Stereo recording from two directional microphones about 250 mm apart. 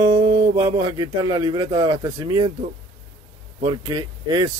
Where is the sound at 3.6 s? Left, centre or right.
Centre.